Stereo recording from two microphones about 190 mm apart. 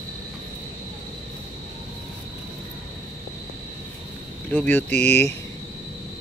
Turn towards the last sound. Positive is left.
turn(degrees=10)  # may be behind; listen again after turning